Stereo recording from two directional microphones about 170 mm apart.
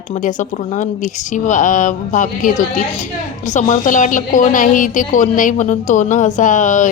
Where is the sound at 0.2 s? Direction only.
45° left (ahead or behind).